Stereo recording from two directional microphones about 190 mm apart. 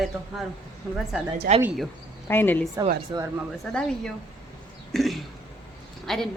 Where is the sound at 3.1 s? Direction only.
15° right (ahead or behind).